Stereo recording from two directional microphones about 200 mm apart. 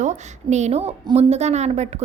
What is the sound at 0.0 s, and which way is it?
A woman's voice, 35° right (ahead or behind).